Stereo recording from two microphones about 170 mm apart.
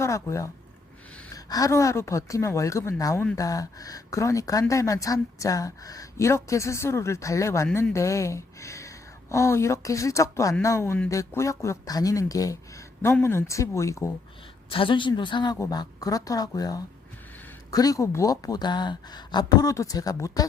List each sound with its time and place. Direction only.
0.0 s a woman's voice: 15° left (ahead or behind)
14.7 s speech: 30° left (ahead or behind)